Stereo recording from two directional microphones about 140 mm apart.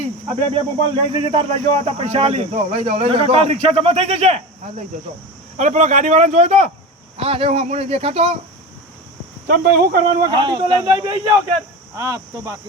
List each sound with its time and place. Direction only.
0.3 s speech: 45° right (ahead or behind)
5.5 s speech: 55° right (ahead or behind)
7.2 s speech: 45° right (ahead or behind)
9.5 s speech: 75° right (ahead or behind)
10.3 s speech: 35° right (ahead or behind)
11.9 s cricket: 25° right (ahead or behind)